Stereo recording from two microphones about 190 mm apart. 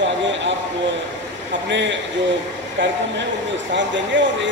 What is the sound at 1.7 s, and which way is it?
Speech, 70° right (ahead or behind).